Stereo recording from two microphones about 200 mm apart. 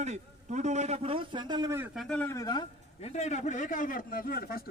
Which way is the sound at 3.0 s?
35° left (ahead or behind).